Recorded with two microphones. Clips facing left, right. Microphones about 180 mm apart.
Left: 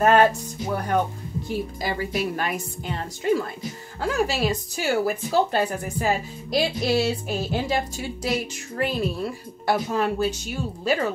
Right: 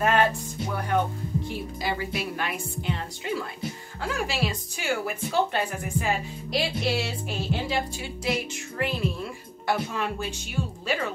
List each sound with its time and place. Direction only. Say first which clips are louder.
0.0 s music: left 5 dB; 40° left (ahead or behind)
1.8 s a woman's voice: left 1 dB; 40° left (ahead or behind)